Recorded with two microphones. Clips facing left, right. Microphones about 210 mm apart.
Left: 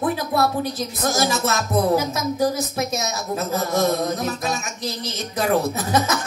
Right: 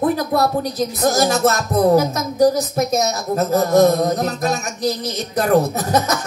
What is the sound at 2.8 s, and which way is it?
A woman's voice, 40° right (ahead or behind).